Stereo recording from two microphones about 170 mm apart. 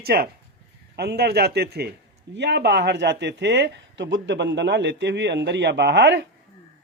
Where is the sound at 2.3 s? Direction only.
85° right.